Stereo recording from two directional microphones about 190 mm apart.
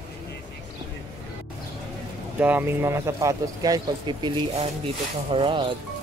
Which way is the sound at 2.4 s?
10° right (ahead or behind).